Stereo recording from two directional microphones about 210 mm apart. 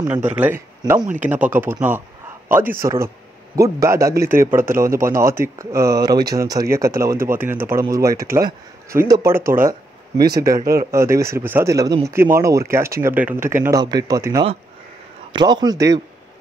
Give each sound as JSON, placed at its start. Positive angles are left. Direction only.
{"t": 0.1, "sound": "a man's voice", "side_deg": -10}
{"t": 9.5, "sound": "a sound", "side_deg": -15}
{"t": 10.6, "sound": "speech", "side_deg": -45}
{"t": 10.9, "sound": "speech", "side_deg": -15}